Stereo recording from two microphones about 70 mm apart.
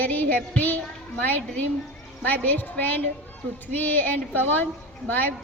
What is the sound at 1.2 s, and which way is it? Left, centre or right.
A woman's voice, left.